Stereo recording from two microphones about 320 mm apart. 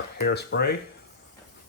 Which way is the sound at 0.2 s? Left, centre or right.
Left.